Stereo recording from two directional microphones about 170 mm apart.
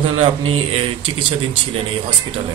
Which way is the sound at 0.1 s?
35° right (ahead or behind).